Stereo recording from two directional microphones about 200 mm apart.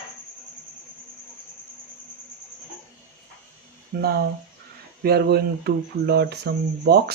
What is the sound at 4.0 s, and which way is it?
Speech, 50° right (ahead or behind).